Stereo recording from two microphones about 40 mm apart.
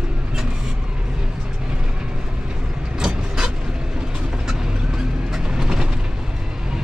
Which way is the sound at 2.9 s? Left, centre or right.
Centre.